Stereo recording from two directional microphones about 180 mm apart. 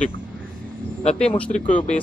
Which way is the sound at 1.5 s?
45° left (ahead or behind).